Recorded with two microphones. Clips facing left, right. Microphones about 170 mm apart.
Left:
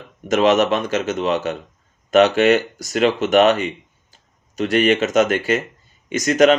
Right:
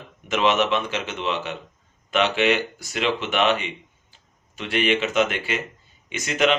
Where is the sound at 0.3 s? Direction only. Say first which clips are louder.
Left 6 dB; 45° left (ahead or behind).